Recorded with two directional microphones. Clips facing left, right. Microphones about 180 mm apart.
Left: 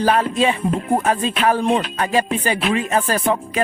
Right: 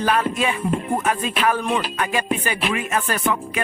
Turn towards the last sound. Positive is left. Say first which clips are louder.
# left 3 dB
turn(degrees=35)  # may be behind; listen again after turning